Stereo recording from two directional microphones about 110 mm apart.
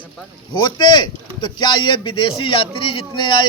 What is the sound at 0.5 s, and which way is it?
A man's voice, 45° left (ahead or behind).